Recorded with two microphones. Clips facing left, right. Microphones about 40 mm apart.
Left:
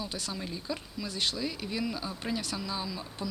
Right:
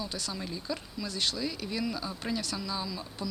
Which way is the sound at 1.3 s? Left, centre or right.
Centre.